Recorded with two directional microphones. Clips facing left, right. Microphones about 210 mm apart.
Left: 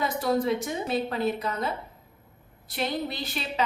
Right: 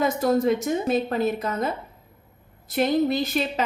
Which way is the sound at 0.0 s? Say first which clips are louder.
Right 5 dB; 45° right (ahead or behind).